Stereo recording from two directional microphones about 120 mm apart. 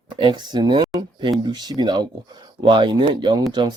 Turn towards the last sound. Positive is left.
turn(degrees=-40)  # may be behind; listen again after turning